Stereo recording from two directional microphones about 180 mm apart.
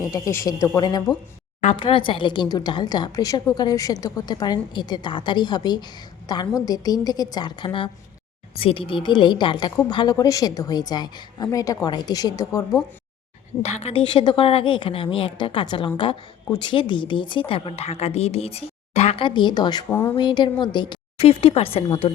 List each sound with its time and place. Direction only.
0.1 s a woman's voice: 15° left (ahead or behind)
13.6 s a woman's voice: 40° left (ahead or behind)
19.9 s speech: 10° left (ahead or behind)
20.1 s a woman's voice: 25° left (ahead or behind)